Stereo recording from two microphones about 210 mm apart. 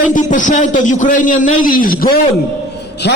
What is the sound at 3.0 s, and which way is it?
Speech, 55° left (ahead or behind).